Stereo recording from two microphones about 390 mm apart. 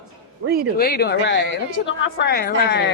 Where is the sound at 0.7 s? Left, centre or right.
Left.